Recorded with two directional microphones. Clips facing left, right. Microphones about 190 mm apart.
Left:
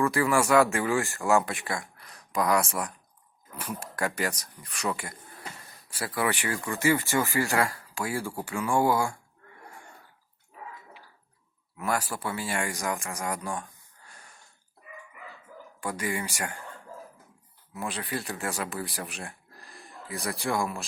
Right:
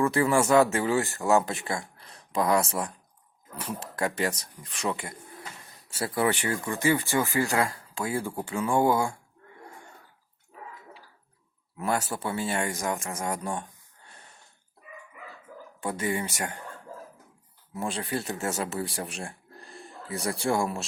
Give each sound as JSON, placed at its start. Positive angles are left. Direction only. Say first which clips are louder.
{"t": 0.0, "sound": "speech", "louder": "right 1 dB", "side_deg": -25}
{"t": 6.5, "sound": "speech", "louder": "even", "side_deg": -20}
{"t": 11.8, "sound": "speech", "louder": "right 1 dB", "side_deg": -25}
{"t": 15.8, "sound": "speech", "louder": "right 2 dB", "side_deg": -25}
{"t": 17.7, "sound": "speech", "louder": "right 3 dB", "side_deg": -30}